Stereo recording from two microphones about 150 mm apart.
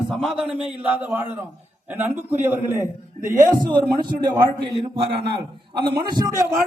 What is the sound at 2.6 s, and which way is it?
Speech, 20° left (ahead or behind).